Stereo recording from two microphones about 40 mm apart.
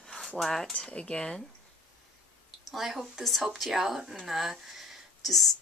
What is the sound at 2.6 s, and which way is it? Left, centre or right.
Speech, centre.